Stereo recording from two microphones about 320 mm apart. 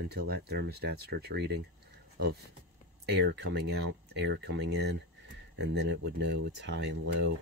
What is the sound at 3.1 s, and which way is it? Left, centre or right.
Speech, right.